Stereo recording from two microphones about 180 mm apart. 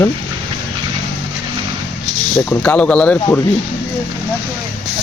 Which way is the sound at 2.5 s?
10° left (ahead or behind).